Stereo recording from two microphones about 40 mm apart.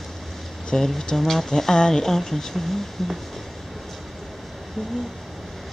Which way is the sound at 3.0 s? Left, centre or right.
Centre.